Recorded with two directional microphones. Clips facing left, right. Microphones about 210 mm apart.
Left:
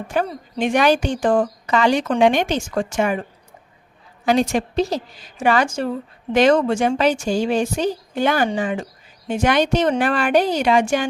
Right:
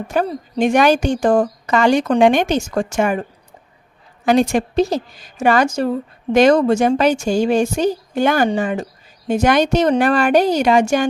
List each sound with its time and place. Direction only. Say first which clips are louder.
0.1 s a woman's voice: right 3 dB; 35° right (ahead or behind)
4.3 s a woman's voice: right 3 dB; 50° right (ahead or behind)